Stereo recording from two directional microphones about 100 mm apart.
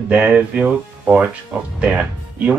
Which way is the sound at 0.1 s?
15° right (ahead or behind).